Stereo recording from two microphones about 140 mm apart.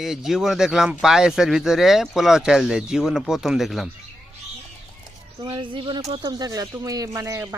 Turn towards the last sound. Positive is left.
turn(degrees=-20)  # may be behind; listen again after turning